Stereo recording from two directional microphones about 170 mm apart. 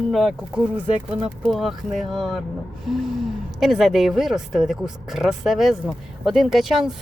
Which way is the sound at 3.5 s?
Centre (ahead or behind).